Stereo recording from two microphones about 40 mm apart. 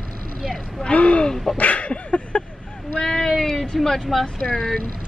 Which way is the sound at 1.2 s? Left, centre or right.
Centre.